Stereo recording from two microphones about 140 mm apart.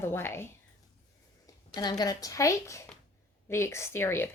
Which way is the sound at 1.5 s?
30° left (ahead or behind).